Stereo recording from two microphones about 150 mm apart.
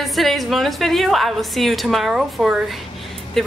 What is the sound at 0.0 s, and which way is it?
Speech, centre (ahead or behind).